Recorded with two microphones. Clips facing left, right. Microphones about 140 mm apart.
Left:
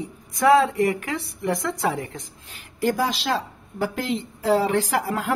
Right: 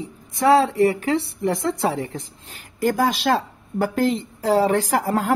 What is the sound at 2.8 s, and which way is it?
A woman's voice, 50° right (ahead or behind).